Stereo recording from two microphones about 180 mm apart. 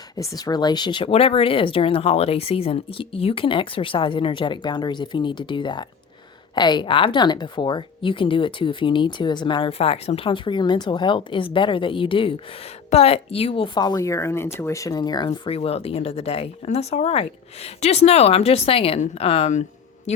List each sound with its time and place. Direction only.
0.2 s a woman's voice: 20° left (ahead or behind); by 20.2 s 40° left (ahead or behind)